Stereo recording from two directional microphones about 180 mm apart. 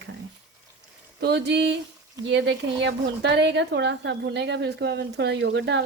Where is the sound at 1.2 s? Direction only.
70° right (ahead or behind).